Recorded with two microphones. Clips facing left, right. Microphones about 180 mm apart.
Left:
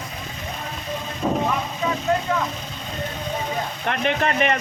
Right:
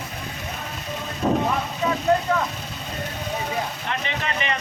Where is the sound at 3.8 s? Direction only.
55° left (ahead or behind).